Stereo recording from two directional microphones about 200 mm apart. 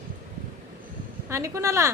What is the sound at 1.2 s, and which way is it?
Speech, 15° right (ahead or behind).